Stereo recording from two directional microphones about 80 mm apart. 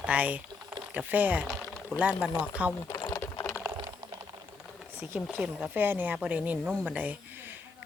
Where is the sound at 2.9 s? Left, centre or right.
Left.